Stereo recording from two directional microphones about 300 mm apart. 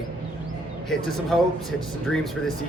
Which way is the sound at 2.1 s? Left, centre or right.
Centre.